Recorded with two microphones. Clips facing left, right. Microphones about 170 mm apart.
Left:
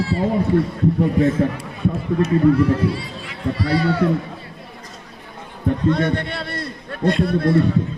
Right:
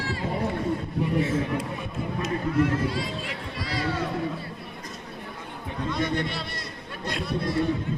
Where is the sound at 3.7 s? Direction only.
75° left (ahead or behind).